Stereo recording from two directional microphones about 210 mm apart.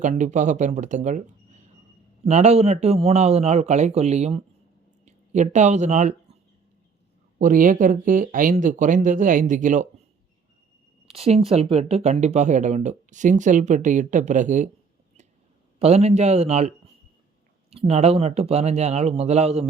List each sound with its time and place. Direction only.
0.0 s speech: 35° right (ahead or behind)
7.3 s speech: 40° right (ahead or behind)
11.1 s speech: 30° right (ahead or behind)
15.8 s speech: 30° right (ahead or behind)